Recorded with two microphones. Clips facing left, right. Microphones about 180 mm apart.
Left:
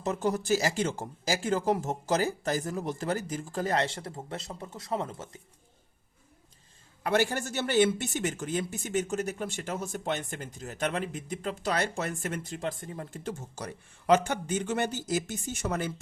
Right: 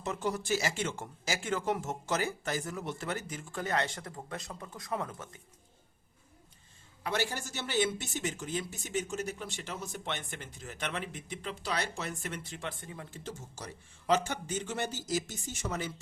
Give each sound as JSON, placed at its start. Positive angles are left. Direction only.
{"t": 0.0, "sound": "speech", "side_deg": 40}
{"t": 7.0, "sound": "speech", "side_deg": 50}